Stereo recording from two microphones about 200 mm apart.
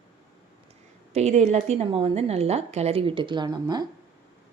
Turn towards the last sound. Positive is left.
turn(degrees=-20)  # may be behind; listen again after turning